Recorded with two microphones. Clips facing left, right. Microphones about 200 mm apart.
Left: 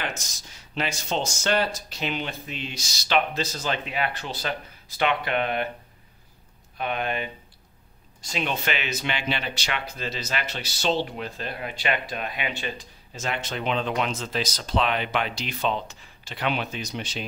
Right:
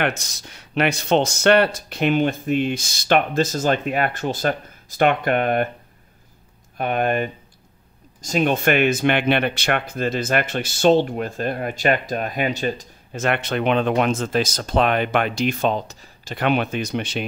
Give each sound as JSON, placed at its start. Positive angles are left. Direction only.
{"t": 0.0, "sound": "speech", "side_deg": -65}
{"t": 6.8, "sound": "speech", "side_deg": -50}
{"t": 13.2, "sound": "speech", "side_deg": -60}